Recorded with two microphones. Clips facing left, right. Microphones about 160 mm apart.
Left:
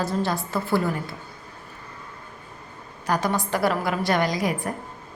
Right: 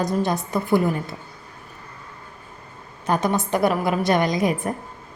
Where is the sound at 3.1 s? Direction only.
20° right (ahead or behind).